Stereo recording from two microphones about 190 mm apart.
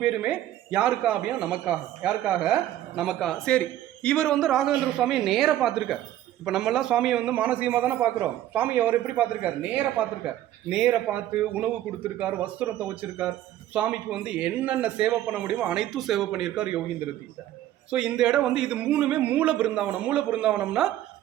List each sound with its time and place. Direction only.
0.0 s a man's voice: 5° right (ahead or behind)
17.9 s speech: 5° right (ahead or behind)